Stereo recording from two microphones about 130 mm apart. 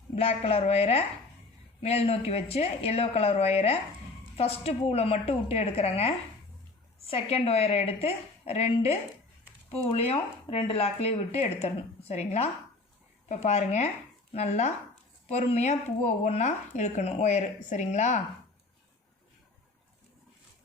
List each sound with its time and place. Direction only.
0.2 s speech: 50° left (ahead or behind); by 18.2 s 65° left (ahead or behind)